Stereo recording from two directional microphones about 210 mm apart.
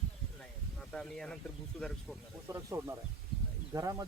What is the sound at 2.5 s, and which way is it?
Speech, 15° right (ahead or behind).